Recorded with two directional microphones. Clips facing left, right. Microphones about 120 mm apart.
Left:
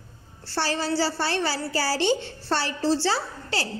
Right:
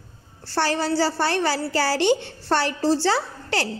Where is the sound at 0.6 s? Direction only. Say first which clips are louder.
Right 3 dB; 55° right (ahead or behind).